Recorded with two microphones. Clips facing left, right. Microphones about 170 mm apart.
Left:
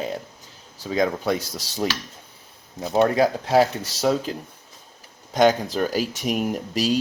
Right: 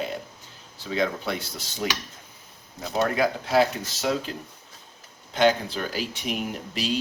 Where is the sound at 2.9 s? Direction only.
35° left (ahead or behind).